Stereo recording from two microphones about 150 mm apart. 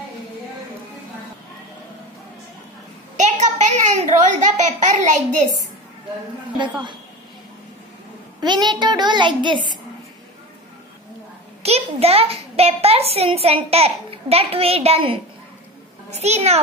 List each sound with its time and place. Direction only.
3.2 s a child's voice: 55° right (ahead or behind)
8.4 s a child's voice: 30° right (ahead or behind)
11.6 s a child's voice: 45° right (ahead or behind)